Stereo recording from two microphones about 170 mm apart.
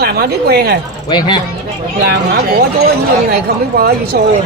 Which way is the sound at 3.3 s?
65° right (ahead or behind).